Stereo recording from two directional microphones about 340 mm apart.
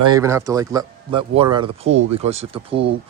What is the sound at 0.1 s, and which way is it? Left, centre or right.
Speech, centre.